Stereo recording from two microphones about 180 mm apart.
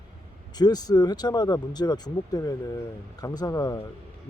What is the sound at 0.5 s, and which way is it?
Speech, 20° left (ahead or behind).